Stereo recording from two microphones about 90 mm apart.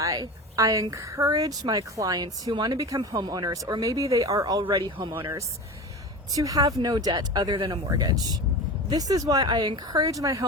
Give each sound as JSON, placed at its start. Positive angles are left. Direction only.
{"t": 0.0, "sound": "a woman's voice", "side_deg": -40}
{"t": 2.5, "sound": "speech", "side_deg": -55}
{"t": 2.7, "sound": "a woman's voice", "side_deg": -40}
{"t": 4.7, "sound": "speech", "side_deg": -65}
{"t": 6.3, "sound": "speech", "side_deg": -40}